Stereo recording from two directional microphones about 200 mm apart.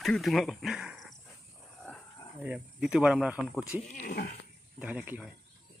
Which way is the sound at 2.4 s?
5° right (ahead or behind).